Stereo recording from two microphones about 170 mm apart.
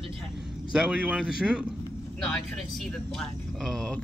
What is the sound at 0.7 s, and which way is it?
Speech, 5° right (ahead or behind).